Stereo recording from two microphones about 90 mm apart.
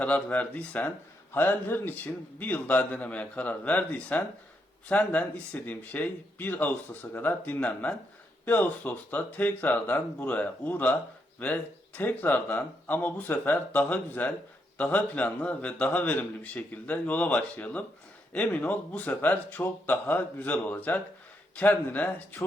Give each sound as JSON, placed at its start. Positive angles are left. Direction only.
{"t": 0.0, "sound": "a man's voice", "side_deg": 15}